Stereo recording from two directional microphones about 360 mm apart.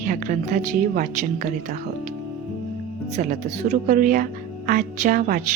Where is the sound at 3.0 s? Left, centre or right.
Centre.